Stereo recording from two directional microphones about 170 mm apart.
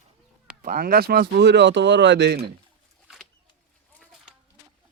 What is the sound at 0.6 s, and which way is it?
Speech, 55° right (ahead or behind).